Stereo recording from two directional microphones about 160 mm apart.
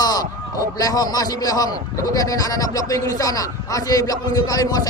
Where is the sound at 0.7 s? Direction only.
25° left (ahead or behind).